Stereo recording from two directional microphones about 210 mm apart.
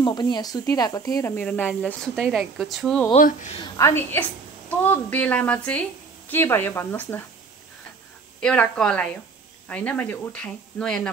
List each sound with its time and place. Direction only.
0.0 s a woman's voice: 20° left (ahead or behind); by 3.1 s centre (ahead or behind)
3.1 s speech: 35° left (ahead or behind)
3.7 s a woman's voice: 10° left (ahead or behind)
8.4 s a woman's voice: 5° left (ahead or behind)